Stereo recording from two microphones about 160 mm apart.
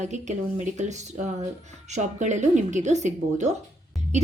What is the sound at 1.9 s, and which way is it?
A woman's voice, 50° right (ahead or behind).